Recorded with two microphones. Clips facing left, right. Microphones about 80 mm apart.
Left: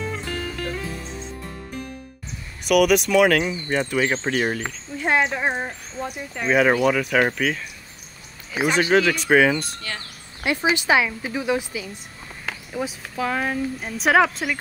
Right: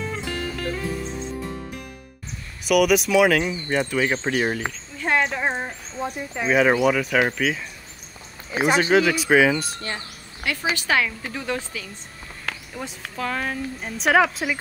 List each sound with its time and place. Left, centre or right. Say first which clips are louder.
0.0 s music: even; centre
2.6 s speech: left 1 dB; centre
4.9 s a woman's voice: left 2 dB; centre
6.3 s speech: even; centre
8.5 s speech: right 1 dB; right
8.9 s speech: left 1 dB; centre
10.4 s a woman's voice: left 4 dB; left; by 14.4 s centre